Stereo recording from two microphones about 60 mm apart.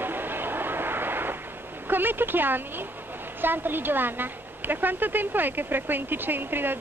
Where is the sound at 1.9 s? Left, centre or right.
Right.